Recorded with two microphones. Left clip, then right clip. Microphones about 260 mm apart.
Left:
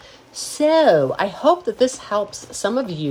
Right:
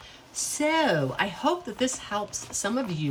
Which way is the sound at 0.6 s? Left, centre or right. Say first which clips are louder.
Left 10 dB; centre.